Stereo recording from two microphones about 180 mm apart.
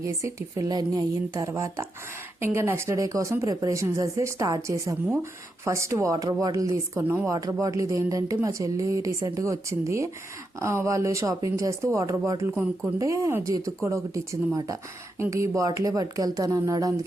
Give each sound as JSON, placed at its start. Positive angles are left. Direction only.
{"t": 0.2, "sound": "speech", "side_deg": -15}